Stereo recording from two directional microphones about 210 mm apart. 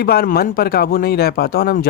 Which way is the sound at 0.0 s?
45° left (ahead or behind).